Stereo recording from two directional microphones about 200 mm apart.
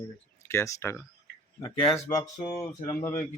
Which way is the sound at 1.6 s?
25° left (ahead or behind).